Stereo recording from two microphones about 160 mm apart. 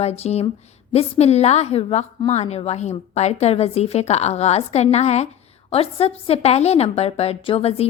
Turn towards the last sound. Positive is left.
turn(degrees=40)  # may be behind; listen again after turning